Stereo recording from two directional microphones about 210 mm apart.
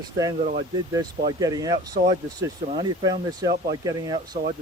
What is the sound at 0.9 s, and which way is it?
Speech, 20° right (ahead or behind).